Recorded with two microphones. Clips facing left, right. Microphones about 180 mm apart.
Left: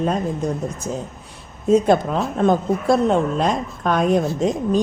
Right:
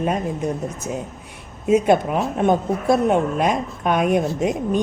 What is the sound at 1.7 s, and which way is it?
Speech, 5° right (ahead or behind).